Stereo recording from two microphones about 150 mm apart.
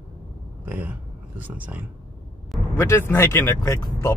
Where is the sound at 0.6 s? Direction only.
10° right (ahead or behind).